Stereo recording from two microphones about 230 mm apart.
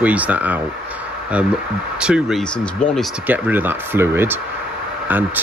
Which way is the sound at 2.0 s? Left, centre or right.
Centre.